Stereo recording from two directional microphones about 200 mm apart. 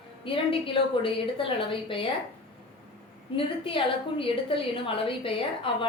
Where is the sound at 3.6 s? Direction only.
25° left (ahead or behind).